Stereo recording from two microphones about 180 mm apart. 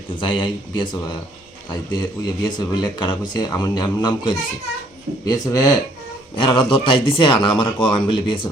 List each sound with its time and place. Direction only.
0.2 s speech: 25° left (ahead or behind)